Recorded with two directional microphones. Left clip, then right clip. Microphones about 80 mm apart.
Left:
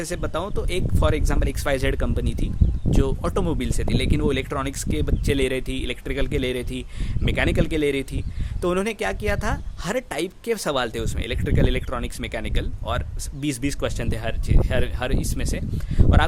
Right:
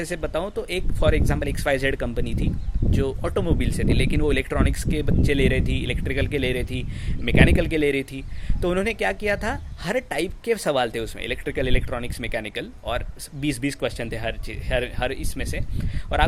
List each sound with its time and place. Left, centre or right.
0.0 s speech: left
3.6 s speech: left